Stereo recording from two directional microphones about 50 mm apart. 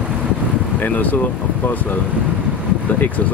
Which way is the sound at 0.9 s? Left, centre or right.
Left.